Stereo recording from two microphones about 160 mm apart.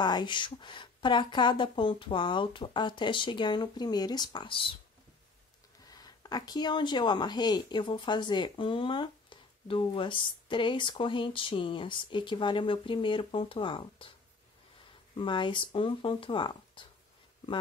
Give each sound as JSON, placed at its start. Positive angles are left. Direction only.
{"t": 0.0, "sound": "speech", "side_deg": 25}
{"t": 5.9, "sound": "speech", "side_deg": 25}
{"t": 15.1, "sound": "speech", "side_deg": 30}